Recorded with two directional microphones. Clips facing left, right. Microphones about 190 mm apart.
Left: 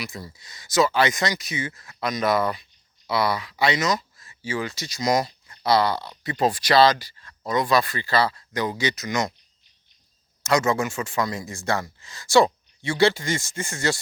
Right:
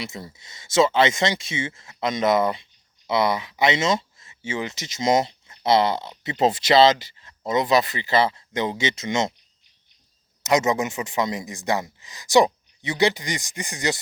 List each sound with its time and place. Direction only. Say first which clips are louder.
0.0 s speech: right 1 dB; 25° right (ahead or behind)
10.4 s speech: right 1 dB; 20° right (ahead or behind)